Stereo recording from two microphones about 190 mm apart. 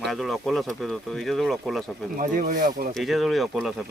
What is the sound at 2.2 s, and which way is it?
Speech, 45° right (ahead or behind).